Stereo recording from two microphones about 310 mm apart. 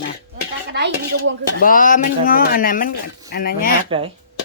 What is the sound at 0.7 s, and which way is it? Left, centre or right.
Speech, right.